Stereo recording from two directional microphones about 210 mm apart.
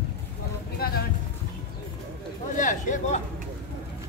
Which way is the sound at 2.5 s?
35° left (ahead or behind).